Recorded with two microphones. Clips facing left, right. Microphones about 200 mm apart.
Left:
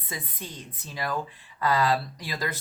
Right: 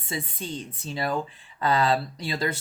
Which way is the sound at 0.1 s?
30° right (ahead or behind).